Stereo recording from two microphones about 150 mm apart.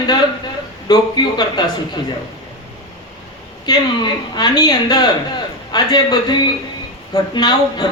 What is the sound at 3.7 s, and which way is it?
Speech, 30° left (ahead or behind).